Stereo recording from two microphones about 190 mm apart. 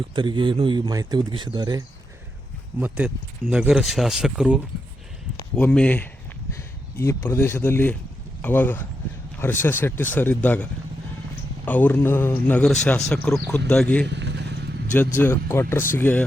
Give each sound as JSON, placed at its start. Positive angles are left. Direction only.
{"t": 0.2, "sound": "speech", "side_deg": -25}
{"t": 2.8, "sound": "speech", "side_deg": -10}
{"t": 5.5, "sound": "speech", "side_deg": 10}
{"t": 14.1, "sound": "motorcycle", "side_deg": -65}
{"t": 15.2, "sound": "speech", "side_deg": 15}